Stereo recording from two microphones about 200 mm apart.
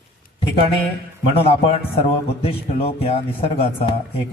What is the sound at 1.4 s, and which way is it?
A man's voice, 30° left (ahead or behind).